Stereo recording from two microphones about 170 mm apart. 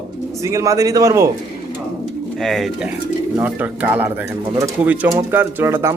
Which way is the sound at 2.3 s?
Centre (ahead or behind).